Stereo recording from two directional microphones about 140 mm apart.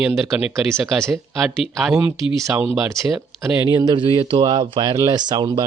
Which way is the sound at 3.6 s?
30° right (ahead or behind).